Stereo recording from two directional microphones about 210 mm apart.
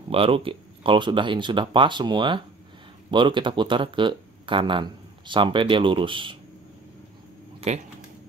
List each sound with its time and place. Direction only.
0.1 s speech: 25° right (ahead or behind)